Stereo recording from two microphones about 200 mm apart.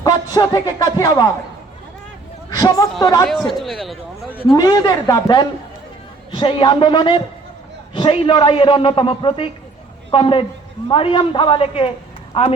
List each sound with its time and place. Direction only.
0.3 s a man's voice: 20° left (ahead or behind)
2.6 s a woman's voice: 20° left (ahead or behind)
3.6 s speech: centre (ahead or behind)
4.4 s a man's voice: 20° left (ahead or behind)